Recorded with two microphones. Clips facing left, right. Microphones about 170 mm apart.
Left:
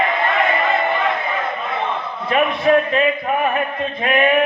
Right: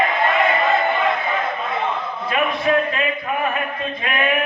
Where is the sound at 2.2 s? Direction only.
30° left (ahead or behind).